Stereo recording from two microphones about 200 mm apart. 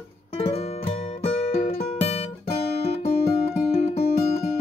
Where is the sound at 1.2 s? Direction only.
30° left (ahead or behind).